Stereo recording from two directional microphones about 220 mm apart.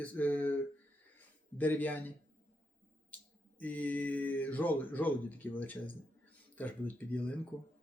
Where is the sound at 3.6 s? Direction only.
5° left (ahead or behind).